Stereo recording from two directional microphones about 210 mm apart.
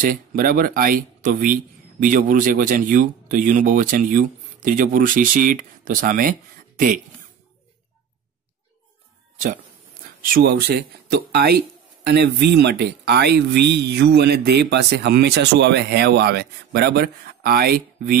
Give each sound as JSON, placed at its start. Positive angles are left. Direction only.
{"t": 0.0, "sound": "speech", "side_deg": -40}
{"t": 10.3, "sound": "speech", "side_deg": -50}